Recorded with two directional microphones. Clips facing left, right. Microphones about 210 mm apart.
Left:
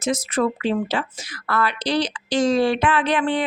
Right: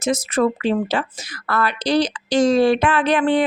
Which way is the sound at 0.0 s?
45° right (ahead or behind).